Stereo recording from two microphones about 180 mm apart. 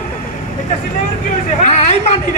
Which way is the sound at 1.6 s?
35° left (ahead or behind).